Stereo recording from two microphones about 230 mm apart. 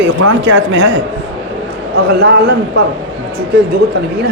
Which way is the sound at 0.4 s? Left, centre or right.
Right.